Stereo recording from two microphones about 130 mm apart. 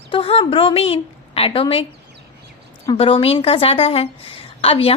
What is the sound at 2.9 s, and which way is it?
A woman's voice, 45° left (ahead or behind).